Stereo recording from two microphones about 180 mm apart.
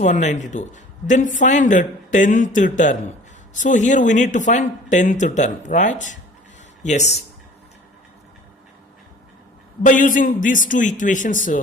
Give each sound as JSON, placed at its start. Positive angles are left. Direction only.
{"t": 0.0, "sound": "speech", "side_deg": 40}
{"t": 9.8, "sound": "speech", "side_deg": 45}